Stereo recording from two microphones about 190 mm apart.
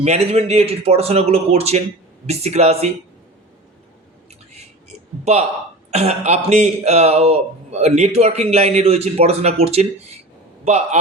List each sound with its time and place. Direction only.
0.0 s speech: 35° right (ahead or behind)
4.9 s a sound: 35° right (ahead or behind)
5.9 s speech: 35° right (ahead or behind)